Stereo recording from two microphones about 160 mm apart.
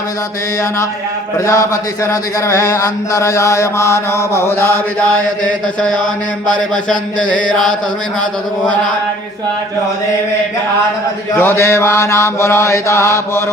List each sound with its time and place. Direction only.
1.5 s speech: 20° left (ahead or behind)
5.4 s mantra: 5° left (ahead or behind)
7.2 s chant: 5° left (ahead or behind)
11.3 s mantra: 15° left (ahead or behind)